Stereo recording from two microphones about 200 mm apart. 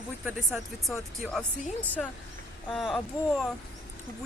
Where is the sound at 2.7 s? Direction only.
Centre (ahead or behind).